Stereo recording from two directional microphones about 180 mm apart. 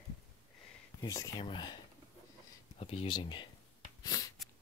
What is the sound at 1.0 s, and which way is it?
Speech, 20° left (ahead or behind).